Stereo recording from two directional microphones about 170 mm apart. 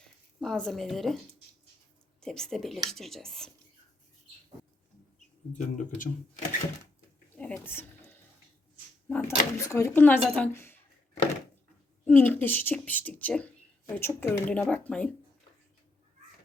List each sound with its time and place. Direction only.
0.0 s speech: 5° left (ahead or behind)
2.2 s speech: 5° left (ahead or behind)
5.5 s speech: 50° left (ahead or behind)
7.3 s a sound: 5° left (ahead or behind)
9.0 s a woman's voice: 10° left (ahead or behind)